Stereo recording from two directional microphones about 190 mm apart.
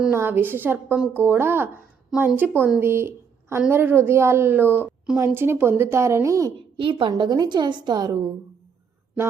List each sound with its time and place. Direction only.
0.0 s a woman's voice: 10° right (ahead or behind)